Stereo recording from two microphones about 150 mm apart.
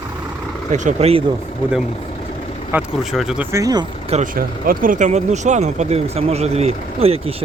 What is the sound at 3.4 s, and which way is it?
Speech, 20° right (ahead or behind).